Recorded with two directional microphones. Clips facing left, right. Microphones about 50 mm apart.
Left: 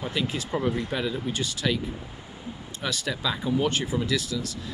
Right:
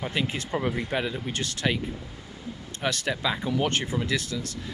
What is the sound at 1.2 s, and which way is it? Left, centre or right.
Speech, right.